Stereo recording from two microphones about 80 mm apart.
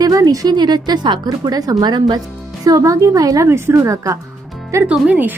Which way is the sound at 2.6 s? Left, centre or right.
Right.